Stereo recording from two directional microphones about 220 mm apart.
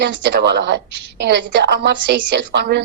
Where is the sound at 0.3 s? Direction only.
50° right (ahead or behind).